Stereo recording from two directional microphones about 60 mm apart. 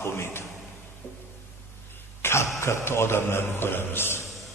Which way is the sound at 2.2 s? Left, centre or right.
Left.